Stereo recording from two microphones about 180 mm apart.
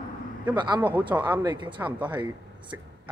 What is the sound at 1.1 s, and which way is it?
Speech, 10° right (ahead or behind).